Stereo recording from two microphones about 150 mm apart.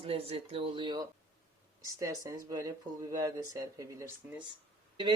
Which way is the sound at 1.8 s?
20° right (ahead or behind).